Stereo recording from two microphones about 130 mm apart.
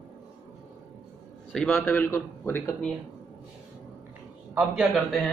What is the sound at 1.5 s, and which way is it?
A man's voice, 5° left (ahead or behind).